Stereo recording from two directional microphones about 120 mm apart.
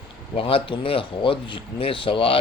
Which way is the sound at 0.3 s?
50° left (ahead or behind).